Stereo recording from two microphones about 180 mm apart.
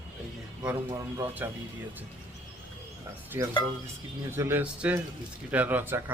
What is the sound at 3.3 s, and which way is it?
Speech, 15° right (ahead or behind).